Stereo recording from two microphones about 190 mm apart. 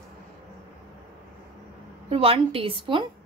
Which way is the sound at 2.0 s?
30° right (ahead or behind).